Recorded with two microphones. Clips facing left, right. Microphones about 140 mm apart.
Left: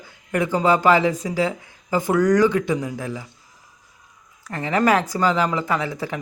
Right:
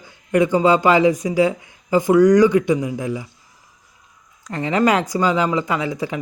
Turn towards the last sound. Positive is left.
turn(degrees=-15)  # may be behind; listen again after turning